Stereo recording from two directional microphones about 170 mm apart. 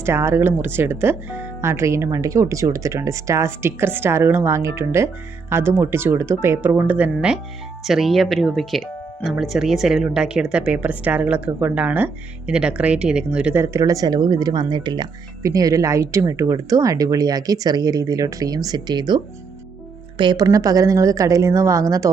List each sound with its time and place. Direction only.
0.0 s speech: 15° right (ahead or behind)